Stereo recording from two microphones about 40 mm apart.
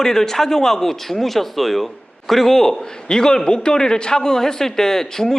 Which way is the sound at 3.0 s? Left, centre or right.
Centre.